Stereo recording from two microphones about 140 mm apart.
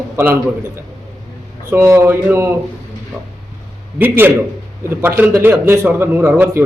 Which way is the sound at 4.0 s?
15° right (ahead or behind).